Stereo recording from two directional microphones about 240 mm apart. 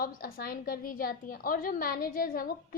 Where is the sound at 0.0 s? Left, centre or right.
Left.